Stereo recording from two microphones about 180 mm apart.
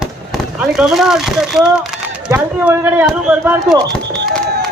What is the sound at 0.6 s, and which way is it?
Speech, 5° right (ahead or behind).